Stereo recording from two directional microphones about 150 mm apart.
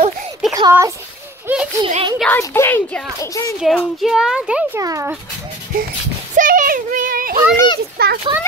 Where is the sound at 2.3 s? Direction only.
15° left (ahead or behind).